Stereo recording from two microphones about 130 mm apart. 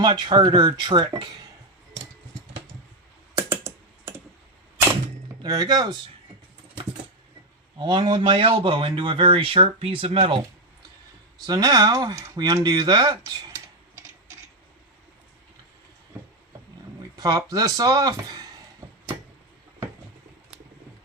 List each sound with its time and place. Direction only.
0.0 s speech: 35° right (ahead or behind)
3.3 s computer keyboard: 20° right (ahead or behind)
5.4 s speech: 30° right (ahead or behind)
7.8 s speech: 35° right (ahead or behind)
11.4 s speech: 30° right (ahead or behind)
13.5 s typing: 20° right (ahead or behind)
17.2 s speech: 30° right (ahead or behind)